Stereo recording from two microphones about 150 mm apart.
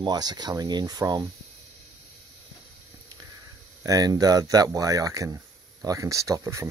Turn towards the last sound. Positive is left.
turn(degrees=-20)  # may be behind; listen again after turning